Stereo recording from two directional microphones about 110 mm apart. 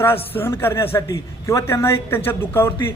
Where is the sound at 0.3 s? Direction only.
20° left (ahead or behind).